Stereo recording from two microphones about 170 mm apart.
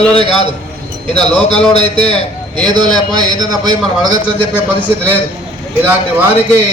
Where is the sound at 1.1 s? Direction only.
5° left (ahead or behind).